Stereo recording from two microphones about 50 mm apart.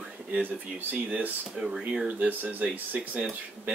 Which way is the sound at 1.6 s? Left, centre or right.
Centre.